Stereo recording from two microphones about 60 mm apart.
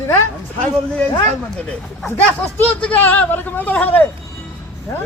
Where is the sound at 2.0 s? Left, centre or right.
Left.